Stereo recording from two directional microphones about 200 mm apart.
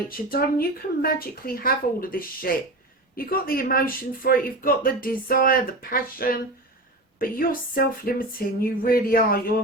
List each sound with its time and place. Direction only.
0.1 s speech: 45° left (ahead or behind)